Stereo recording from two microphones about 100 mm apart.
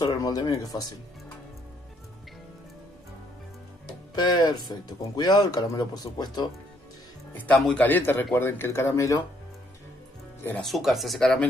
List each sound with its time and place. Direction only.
0.0 s speech: 40° left (ahead or behind)
4.1 s speech: 40° left (ahead or behind)
7.5 s speech: centre (ahead or behind)
7.8 s speech: 20° left (ahead or behind)
10.6 s speech: centre (ahead or behind)